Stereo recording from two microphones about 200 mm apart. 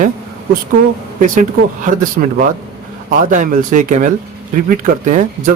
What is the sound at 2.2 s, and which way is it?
Speech, 45° right (ahead or behind).